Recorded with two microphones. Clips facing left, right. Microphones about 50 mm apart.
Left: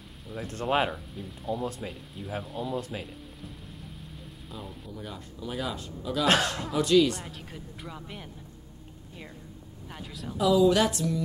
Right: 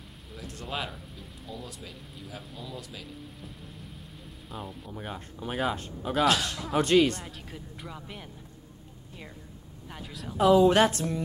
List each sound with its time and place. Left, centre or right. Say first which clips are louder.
0.5 s speech: left 9 dB; left
0.9 s speech: left 5 dB; centre
2.8 s speech: left 7 dB; left
4.5 s speech: right 2 dB; centre
4.9 s speech: right 3 dB; right
6.2 s speech: left 2 dB; left
6.8 s speech: even; right
7.2 s speech: left 1 dB; centre
9.8 s speech: left 1 dB; centre
10.3 s speech: right 2 dB; right